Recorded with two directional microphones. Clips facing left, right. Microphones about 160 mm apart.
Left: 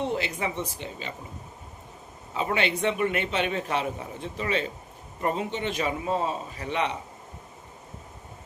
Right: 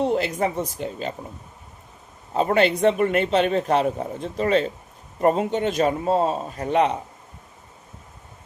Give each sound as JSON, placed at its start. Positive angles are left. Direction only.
{"t": 0.0, "sound": "a sound", "side_deg": -40}
{"t": 0.3, "sound": "a man's voice", "side_deg": -40}
{"t": 2.3, "sound": "a man's voice", "side_deg": -40}